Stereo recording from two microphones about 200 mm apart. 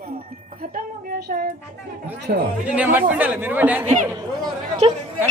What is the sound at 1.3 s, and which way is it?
Speech, 45° right (ahead or behind).